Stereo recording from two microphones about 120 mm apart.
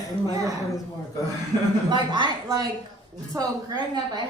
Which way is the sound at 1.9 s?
40° right (ahead or behind).